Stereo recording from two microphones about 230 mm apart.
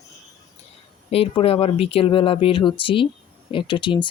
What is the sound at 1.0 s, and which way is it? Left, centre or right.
Speech, left.